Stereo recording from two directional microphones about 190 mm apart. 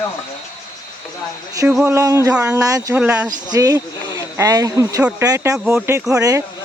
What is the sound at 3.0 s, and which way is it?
Speech, 5° right (ahead or behind).